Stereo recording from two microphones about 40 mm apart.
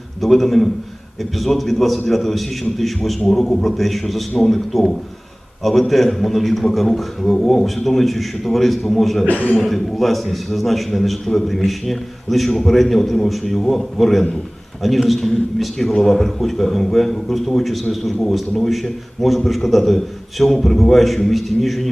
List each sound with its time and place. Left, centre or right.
0.2 s a man's voice: centre
9.3 s speech: left
9.6 s a man's voice: centre